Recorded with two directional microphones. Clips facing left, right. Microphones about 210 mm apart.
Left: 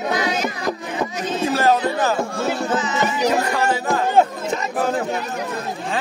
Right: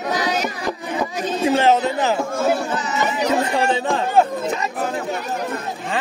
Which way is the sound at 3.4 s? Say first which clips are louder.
Right 1 dB; 25° right (ahead or behind).